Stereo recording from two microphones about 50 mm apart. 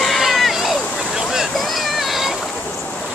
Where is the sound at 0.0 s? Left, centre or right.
Centre.